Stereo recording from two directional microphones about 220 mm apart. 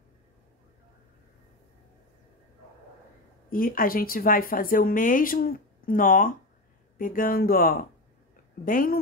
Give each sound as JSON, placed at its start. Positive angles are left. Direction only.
{"t": 3.4, "sound": "speech", "side_deg": 40}